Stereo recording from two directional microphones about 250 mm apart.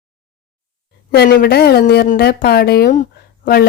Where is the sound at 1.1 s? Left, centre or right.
Left.